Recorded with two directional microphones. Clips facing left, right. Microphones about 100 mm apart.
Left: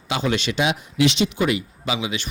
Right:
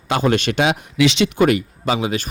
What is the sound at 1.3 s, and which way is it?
Speech, 50° right (ahead or behind).